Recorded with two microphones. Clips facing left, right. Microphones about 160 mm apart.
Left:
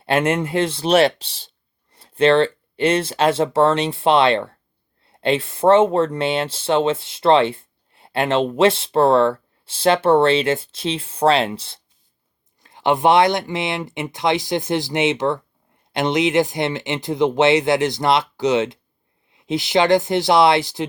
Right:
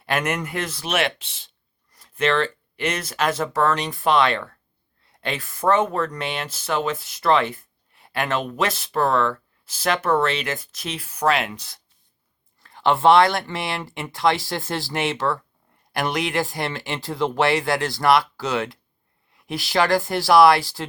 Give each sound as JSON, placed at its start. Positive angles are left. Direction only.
{"t": 0.0, "sound": "speech", "side_deg": 30}